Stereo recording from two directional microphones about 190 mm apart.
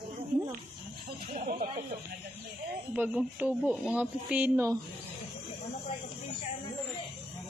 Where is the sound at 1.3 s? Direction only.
35° right (ahead or behind).